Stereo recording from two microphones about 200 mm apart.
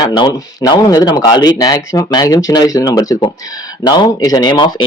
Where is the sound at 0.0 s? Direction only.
20° left (ahead or behind).